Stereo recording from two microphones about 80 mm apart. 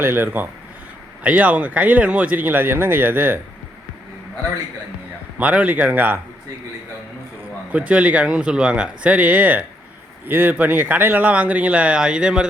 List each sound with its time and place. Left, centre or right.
0.0 s speech: right
5.4 s speech: centre
7.7 s speech: centre